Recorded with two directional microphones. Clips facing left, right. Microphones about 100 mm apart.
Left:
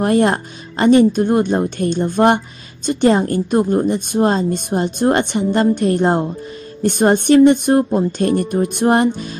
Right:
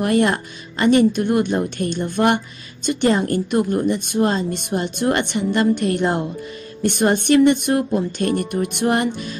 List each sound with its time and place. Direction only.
0.0 s speech: 40° left (ahead or behind)